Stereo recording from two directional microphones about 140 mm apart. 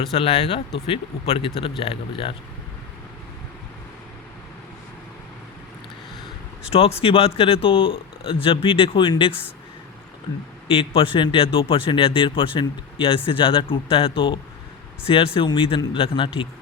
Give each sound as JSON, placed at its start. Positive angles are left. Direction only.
{"t": 0.1, "sound": "speech", "side_deg": 45}
{"t": 6.7, "sound": "speech", "side_deg": 45}
{"t": 10.7, "sound": "speech", "side_deg": 40}